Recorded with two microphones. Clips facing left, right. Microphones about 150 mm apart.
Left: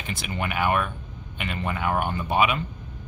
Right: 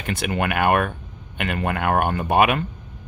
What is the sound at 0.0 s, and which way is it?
Speech, 60° right (ahead or behind).